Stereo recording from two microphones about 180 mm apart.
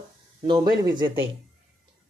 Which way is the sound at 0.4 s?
25° right (ahead or behind).